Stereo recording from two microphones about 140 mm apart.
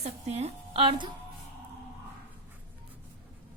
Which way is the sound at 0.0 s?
50° right (ahead or behind).